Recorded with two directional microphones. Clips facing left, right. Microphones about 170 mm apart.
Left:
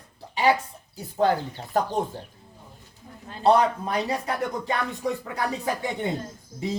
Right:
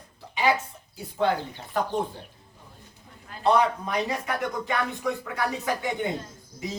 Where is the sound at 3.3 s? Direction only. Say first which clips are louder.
Left 2 dB; 30° left (ahead or behind).